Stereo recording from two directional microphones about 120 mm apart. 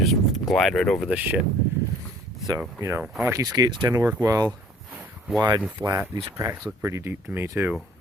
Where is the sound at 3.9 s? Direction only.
25° right (ahead or behind).